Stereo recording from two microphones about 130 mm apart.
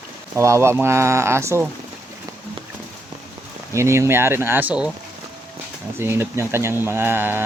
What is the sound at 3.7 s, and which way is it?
Speech, 20° right (ahead or behind).